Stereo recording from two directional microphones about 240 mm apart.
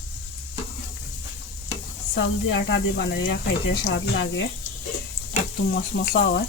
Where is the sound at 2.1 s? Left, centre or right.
Left.